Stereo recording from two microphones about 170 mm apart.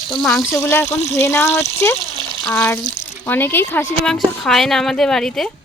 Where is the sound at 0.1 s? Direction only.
Centre (ahead or behind).